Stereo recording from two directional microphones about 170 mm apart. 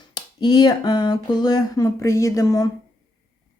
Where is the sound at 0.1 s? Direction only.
25° left (ahead or behind).